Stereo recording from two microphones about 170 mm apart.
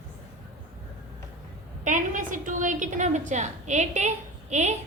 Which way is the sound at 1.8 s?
50° right (ahead or behind).